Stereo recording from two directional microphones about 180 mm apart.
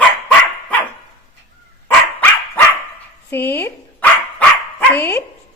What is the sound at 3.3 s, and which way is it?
Speech, 10° left (ahead or behind).